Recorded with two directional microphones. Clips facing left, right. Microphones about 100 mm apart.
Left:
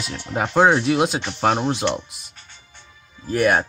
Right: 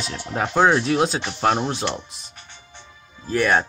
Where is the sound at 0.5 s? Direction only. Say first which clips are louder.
Left 1 dB; 10° left (ahead or behind).